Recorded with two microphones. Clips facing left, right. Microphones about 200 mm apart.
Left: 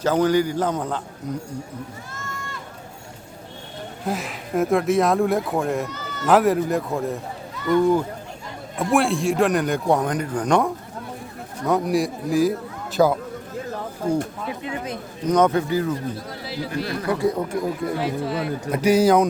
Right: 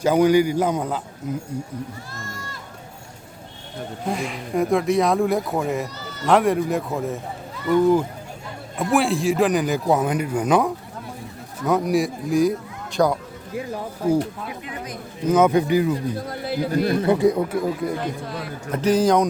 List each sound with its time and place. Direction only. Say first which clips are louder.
0.0 s a man's voice: right 3 dB; 10° right (ahead or behind)
2.1 s a sound: left 1 dB; 40° right (ahead or behind)
4.0 s a man's voice: right 1 dB; centre (ahead or behind)
13.5 s a man's voice: right 4 dB; 10° right (ahead or behind)
14.6 s speech: left 4 dB; 25° left (ahead or behind)
15.3 s a man's voice: right 2 dB; 10° right (ahead or behind)
16.3 s a man's voice: right 5 dB; 50° right (ahead or behind)
16.9 s speech: right 4 dB; 25° right (ahead or behind)
17.2 s speech: right 3 dB; 5° right (ahead or behind)